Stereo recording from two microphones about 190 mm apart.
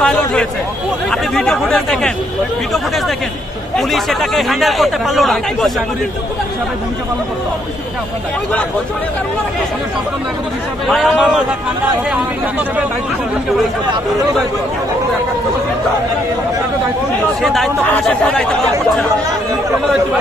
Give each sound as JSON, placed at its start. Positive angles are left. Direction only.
{"t": 0.0, "sound": "speech", "side_deg": 5}
{"t": 3.7, "sound": "speech", "side_deg": 0}
{"t": 10.9, "sound": "speech", "side_deg": -5}
{"t": 17.4, "sound": "speech", "side_deg": 0}